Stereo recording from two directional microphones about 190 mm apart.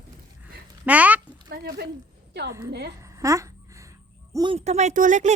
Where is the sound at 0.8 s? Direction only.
10° right (ahead or behind).